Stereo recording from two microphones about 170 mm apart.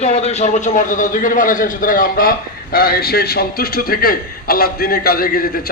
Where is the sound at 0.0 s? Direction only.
40° left (ahead or behind).